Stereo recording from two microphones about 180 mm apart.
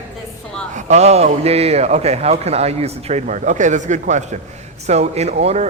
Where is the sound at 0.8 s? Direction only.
40° right (ahead or behind).